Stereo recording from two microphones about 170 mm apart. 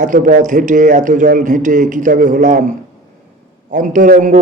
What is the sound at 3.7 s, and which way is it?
Speech, 50° right (ahead or behind).